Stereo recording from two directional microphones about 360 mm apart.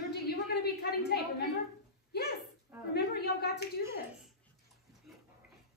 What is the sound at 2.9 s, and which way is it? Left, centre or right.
Speech, left.